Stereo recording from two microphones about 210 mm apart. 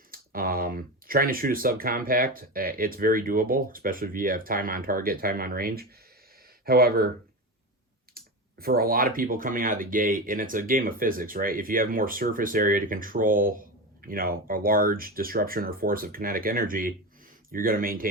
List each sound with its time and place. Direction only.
0.1 s speech: 45° right (ahead or behind)
8.1 s speech: 45° right (ahead or behind)